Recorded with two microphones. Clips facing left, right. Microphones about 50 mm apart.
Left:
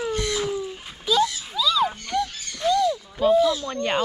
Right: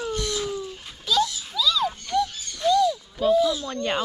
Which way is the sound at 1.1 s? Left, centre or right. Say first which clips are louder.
Left 2 dB; centre.